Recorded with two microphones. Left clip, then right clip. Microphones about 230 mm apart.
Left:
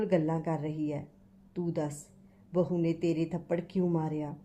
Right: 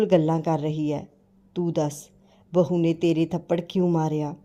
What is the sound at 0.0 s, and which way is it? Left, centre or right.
Speech, right.